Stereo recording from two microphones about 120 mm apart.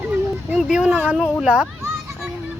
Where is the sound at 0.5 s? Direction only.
5° right (ahead or behind).